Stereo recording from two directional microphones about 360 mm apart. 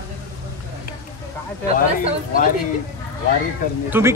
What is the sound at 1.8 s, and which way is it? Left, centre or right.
Speech, left.